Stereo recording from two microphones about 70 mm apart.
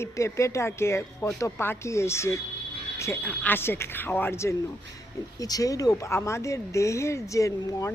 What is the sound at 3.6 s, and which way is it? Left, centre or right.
Speech, left.